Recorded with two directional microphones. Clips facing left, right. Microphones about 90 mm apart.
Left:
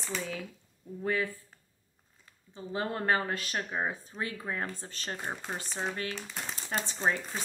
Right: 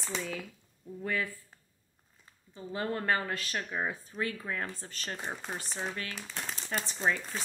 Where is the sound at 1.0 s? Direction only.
20° left (ahead or behind).